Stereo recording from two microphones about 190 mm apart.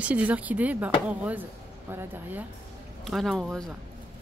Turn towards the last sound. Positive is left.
turn(degrees=0)  # may be behind; listen again after turning